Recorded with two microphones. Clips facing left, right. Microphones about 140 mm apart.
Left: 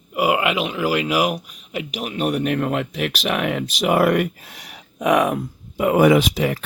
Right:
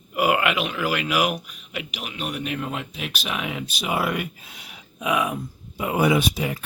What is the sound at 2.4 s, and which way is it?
Speech, 60° left (ahead or behind).